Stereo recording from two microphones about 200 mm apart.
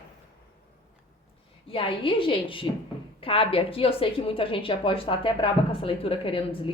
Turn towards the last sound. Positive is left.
turn(degrees=25)  # may be behind; listen again after turning